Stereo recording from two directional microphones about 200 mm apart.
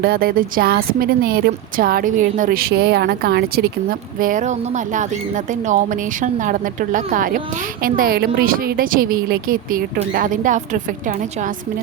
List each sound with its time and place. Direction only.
0.0 s speech: 50° right (ahead or behind)